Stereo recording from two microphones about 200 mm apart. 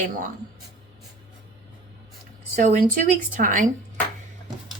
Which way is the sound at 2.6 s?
40° right (ahead or behind).